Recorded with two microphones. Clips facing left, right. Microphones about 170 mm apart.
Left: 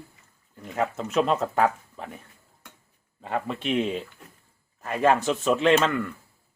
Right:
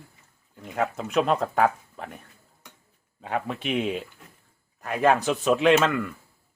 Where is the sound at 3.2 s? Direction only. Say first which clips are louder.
Even; 5° right (ahead or behind).